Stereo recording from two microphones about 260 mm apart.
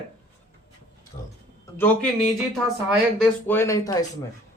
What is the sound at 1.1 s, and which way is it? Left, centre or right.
Speech, left.